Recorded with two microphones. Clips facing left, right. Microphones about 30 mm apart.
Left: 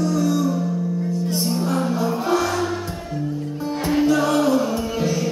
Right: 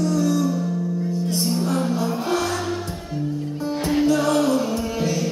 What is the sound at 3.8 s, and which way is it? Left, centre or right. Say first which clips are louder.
Music: left 1 dB; centre.